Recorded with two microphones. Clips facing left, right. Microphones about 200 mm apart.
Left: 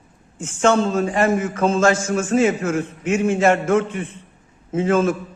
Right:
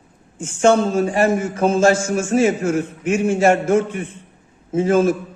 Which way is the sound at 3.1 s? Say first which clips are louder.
Right 1 dB; 10° right (ahead or behind).